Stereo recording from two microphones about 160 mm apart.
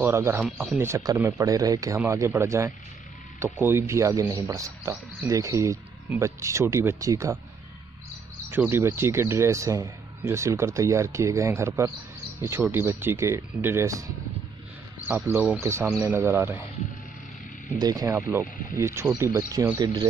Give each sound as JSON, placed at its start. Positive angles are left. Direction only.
{"t": 0.0, "sound": "speech", "side_deg": -15}
{"t": 8.5, "sound": "speech", "side_deg": -15}
{"t": 15.0, "sound": "speech", "side_deg": -10}
{"t": 17.7, "sound": "speech", "side_deg": -25}